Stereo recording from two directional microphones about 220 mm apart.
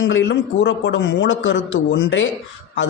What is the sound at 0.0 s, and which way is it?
Speech, 60° left (ahead or behind).